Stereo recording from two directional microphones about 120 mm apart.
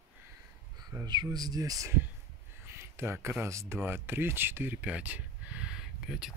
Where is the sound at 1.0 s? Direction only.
35° right (ahead or behind).